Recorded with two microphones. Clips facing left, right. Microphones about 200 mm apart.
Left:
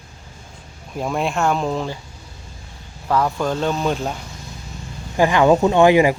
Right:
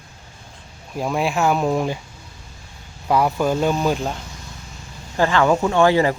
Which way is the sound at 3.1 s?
10° right (ahead or behind).